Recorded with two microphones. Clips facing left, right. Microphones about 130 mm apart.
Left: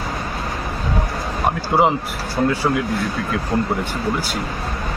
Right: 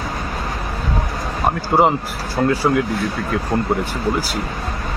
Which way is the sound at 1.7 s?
Centre (ahead or behind).